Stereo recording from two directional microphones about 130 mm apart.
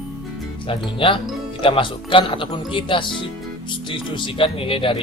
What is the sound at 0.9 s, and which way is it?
Speech, 40° left (ahead or behind).